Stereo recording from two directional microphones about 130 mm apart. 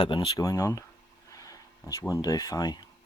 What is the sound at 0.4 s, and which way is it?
Speech, 25° left (ahead or behind).